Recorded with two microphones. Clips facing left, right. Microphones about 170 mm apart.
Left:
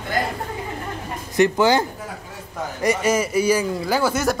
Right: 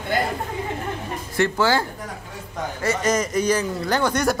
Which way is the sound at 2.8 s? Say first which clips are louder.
Left 2 dB; 10° left (ahead or behind).